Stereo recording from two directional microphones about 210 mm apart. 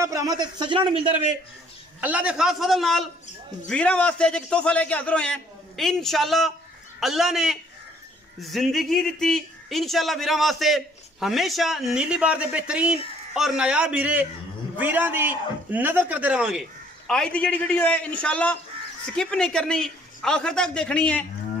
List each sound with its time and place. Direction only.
0.0 s speech: 15° right (ahead or behind)
2.0 s a man's voice: 5° right (ahead or behind)